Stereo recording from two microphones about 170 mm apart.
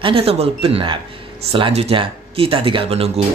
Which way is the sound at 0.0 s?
35° right (ahead or behind).